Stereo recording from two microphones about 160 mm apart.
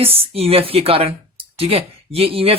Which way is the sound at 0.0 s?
35° right (ahead or behind).